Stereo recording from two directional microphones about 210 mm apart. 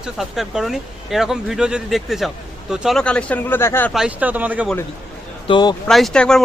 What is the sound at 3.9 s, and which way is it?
Speech, 5° right (ahead or behind).